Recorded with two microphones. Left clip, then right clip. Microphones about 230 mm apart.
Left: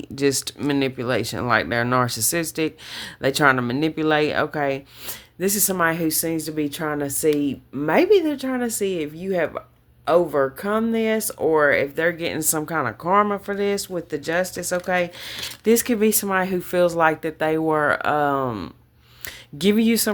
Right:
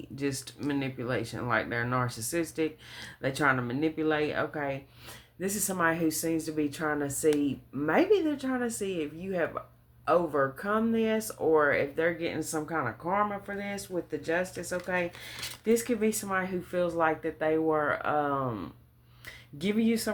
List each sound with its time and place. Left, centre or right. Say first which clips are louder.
0.2 s speech: left 12 dB; left